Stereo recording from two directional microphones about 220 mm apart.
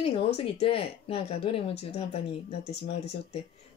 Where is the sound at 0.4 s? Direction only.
25° left (ahead or behind).